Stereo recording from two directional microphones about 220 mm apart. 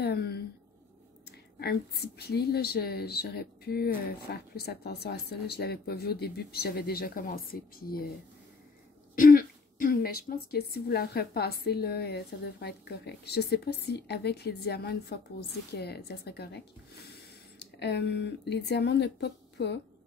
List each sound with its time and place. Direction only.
0.0 s speech: 45° left (ahead or behind)
1.6 s speech: 45° left (ahead or behind)
9.1 s speech: 40° left (ahead or behind)